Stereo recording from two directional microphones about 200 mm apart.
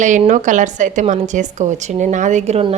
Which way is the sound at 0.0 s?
40° right (ahead or behind).